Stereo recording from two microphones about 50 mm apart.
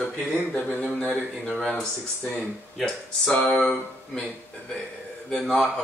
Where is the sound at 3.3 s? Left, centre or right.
Left.